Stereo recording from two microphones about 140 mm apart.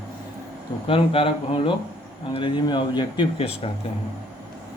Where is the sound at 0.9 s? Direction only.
40° left (ahead or behind).